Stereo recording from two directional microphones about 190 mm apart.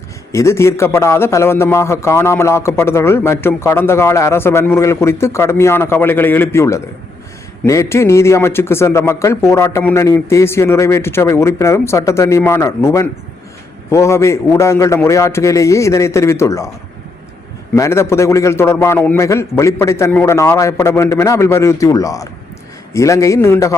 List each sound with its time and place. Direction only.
0.3 s a man's voice: 15° left (ahead or behind)
17.7 s a man's voice: 15° left (ahead or behind)